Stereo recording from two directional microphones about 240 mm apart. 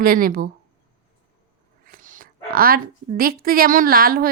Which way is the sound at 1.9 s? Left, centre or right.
Right.